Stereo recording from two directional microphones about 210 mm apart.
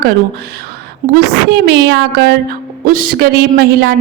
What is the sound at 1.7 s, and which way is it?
Speech, 50° right (ahead or behind).